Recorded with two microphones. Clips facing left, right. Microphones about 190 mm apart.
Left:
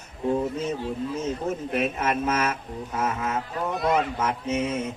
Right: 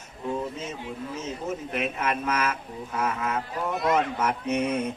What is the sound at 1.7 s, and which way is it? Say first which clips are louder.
Mantra: left 3 dB; 25° left (ahead or behind).